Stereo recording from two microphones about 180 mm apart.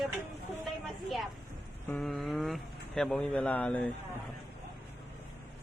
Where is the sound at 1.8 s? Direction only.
5° left (ahead or behind).